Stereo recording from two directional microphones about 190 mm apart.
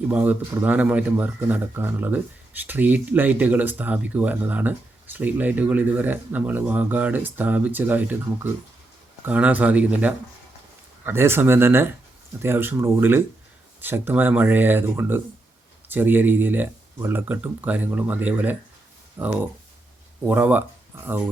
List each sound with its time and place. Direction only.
0.1 s speech: 10° right (ahead or behind)
9.2 s speech: 10° right (ahead or behind)